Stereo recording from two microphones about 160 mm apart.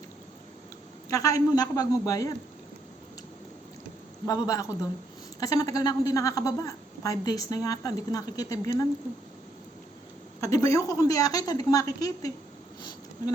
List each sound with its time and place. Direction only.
1.1 s a woman's voice: 20° left (ahead or behind)
4.4 s a woman's voice: 20° left (ahead or behind)
10.4 s a woman's voice: 20° left (ahead or behind)